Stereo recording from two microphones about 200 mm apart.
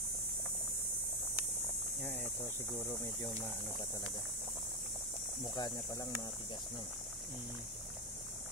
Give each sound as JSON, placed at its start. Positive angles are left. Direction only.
{"t": 5.5, "sound": "speech", "side_deg": 20}